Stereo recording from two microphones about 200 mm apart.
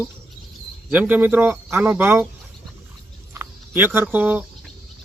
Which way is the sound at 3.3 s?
10° right (ahead or behind).